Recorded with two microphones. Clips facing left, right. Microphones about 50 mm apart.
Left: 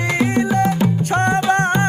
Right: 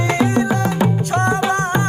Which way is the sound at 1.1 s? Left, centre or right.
Left.